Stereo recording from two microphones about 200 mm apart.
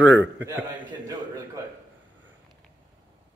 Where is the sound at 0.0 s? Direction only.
65° right (ahead or behind).